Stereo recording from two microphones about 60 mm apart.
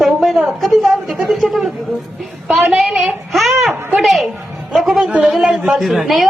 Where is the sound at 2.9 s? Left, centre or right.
Centre.